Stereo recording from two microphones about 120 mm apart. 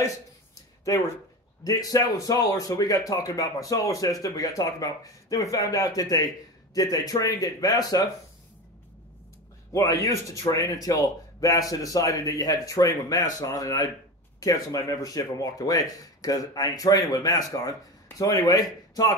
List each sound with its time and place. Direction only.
0.8 s speech: 25° left (ahead or behind)
9.7 s speech: 30° left (ahead or behind)